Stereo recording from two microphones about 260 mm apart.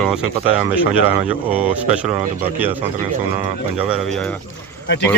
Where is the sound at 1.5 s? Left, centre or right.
Centre.